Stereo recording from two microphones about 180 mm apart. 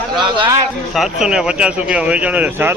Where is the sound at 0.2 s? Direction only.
25° right (ahead or behind).